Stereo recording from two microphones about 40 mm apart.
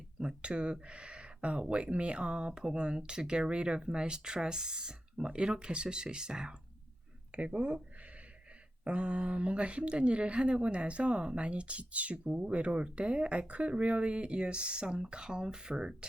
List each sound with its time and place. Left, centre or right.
0.2 s speech: right
7.3 s speech: right
8.8 s speech: right